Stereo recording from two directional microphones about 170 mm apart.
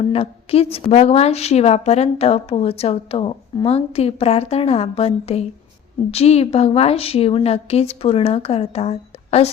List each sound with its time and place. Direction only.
0.1 s a woman's voice: 35° left (ahead or behind)